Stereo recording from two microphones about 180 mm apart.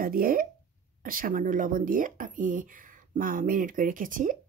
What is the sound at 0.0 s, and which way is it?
Speech, 55° right (ahead or behind).